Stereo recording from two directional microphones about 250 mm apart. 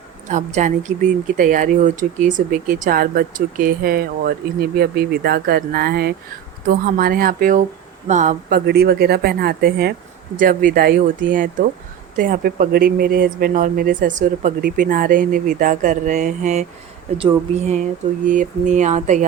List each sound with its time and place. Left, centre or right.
0.3 s speech: right